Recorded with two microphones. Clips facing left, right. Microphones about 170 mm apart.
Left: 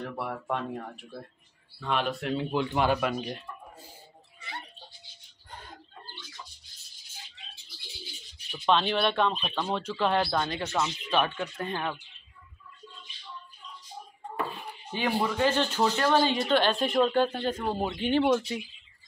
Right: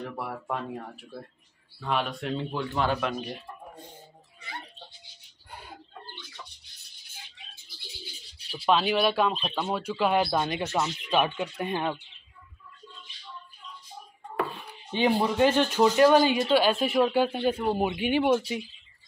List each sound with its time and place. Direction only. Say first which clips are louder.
0.0 s speech: left 1 dB; centre (ahead or behind)
2.5 s speech: left 3 dB; 15° left (ahead or behind)
5.5 s chicken: right 1 dB; 10° right (ahead or behind)
6.4 s music: right 1 dB; 60° right (ahead or behind)
8.6 s speech: right 2 dB; 5° right (ahead or behind)
15.0 s speech: right 4 dB; 20° right (ahead or behind)